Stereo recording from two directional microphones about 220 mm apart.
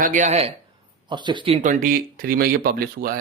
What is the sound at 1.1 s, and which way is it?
Speech, 20° right (ahead or behind).